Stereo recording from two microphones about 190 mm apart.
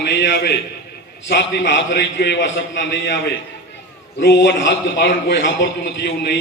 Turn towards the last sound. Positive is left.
turn(degrees=70)  # may be behind; listen again after turning